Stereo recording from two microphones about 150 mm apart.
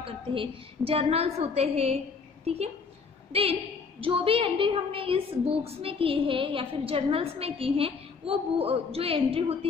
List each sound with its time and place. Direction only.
0.0 s a woman's voice: 35° right (ahead or behind)